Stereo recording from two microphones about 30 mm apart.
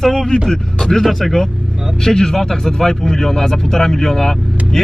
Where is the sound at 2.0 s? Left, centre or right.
Left.